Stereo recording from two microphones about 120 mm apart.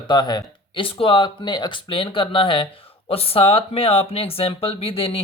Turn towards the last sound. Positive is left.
turn(degrees=50)  # may be behind; listen again after turning